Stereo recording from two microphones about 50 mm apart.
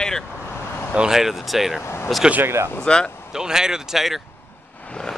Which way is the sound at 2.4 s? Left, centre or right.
Right.